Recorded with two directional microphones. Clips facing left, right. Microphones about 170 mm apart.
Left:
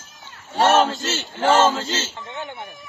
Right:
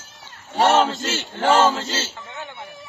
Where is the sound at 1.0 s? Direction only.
10° right (ahead or behind).